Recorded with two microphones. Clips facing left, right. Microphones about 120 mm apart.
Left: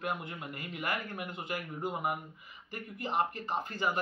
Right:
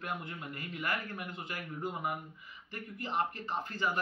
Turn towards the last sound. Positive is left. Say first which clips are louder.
# left 2 dB
turn(degrees=15)  # may be behind; listen again after turning